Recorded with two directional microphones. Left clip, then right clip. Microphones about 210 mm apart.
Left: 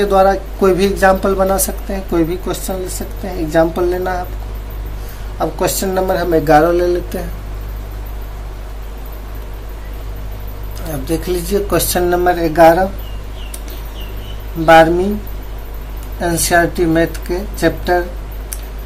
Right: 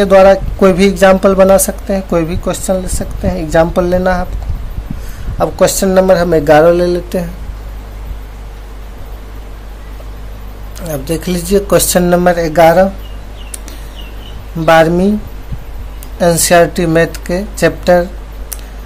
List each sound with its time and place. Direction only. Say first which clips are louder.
0.0 s speech: right 6 dB; 40° right (ahead or behind)
5.4 s speech: right 6 dB; 45° right (ahead or behind)
10.9 s speech: right 2 dB; 40° right (ahead or behind)
16.2 s speech: right 6 dB; 45° right (ahead or behind)